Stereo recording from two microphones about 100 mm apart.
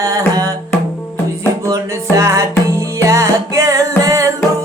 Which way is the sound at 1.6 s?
35° right (ahead or behind).